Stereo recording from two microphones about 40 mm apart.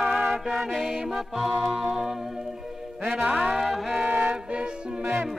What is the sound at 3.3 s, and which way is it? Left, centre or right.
Music, centre.